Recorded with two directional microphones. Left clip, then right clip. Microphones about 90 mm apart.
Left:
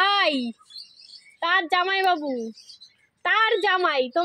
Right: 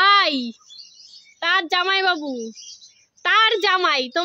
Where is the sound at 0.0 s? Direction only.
45° right (ahead or behind).